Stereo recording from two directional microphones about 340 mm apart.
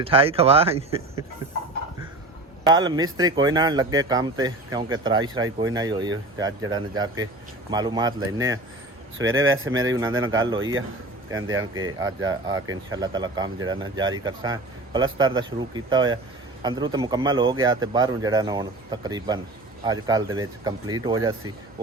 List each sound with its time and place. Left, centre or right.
0.0 s speech: centre
2.6 s speech: centre
9.1 s speech: right
10.3 s speech: centre
11.4 s speech: right
11.9 s speech: centre